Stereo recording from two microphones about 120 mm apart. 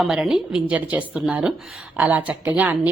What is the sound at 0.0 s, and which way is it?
A woman's voice, 5° right (ahead or behind).